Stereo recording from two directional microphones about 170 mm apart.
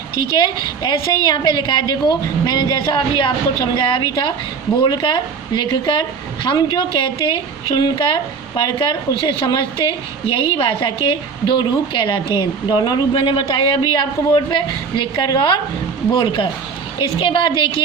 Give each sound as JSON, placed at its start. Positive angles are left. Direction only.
{"t": 0.3, "sound": "a woman's voice", "side_deg": 25}